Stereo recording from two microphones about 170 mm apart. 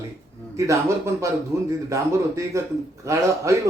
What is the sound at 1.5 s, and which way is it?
A man's voice, 20° right (ahead or behind).